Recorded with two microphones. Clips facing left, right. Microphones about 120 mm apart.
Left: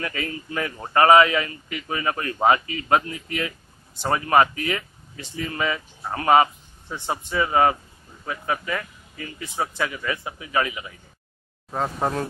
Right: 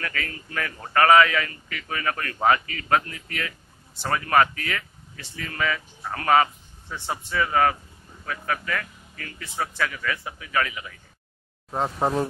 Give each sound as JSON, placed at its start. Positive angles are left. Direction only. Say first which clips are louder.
{"t": 0.0, "sound": "speech", "louder": "left 3 dB", "side_deg": 20}
{"t": 11.7, "sound": "speech", "louder": "right 1 dB", "side_deg": -10}